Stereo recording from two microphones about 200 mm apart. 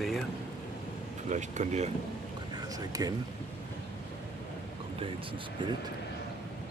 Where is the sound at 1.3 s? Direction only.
35° right (ahead or behind).